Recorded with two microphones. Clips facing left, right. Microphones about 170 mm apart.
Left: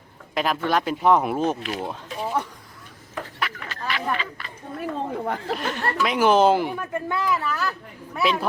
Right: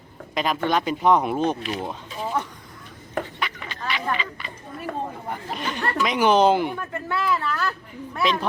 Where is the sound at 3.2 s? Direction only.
Centre (ahead or behind).